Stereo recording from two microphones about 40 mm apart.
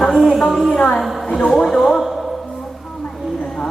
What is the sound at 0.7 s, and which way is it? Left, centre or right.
Speech, left.